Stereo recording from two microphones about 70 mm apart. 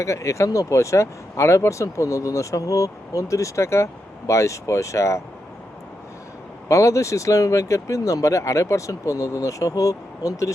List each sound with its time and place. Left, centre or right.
0.0 s speech: left
6.7 s speech: left